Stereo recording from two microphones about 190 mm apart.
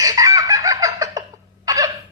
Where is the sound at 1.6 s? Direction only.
15° right (ahead or behind).